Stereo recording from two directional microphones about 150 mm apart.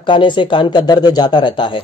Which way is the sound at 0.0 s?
30° left (ahead or behind).